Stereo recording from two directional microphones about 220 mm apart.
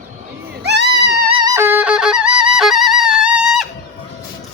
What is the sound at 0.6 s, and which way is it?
Music, 50° right (ahead or behind).